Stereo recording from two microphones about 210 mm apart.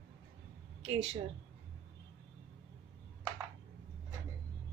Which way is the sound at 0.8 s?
30° right (ahead or behind).